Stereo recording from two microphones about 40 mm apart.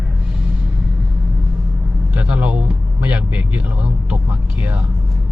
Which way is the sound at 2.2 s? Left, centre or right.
Right.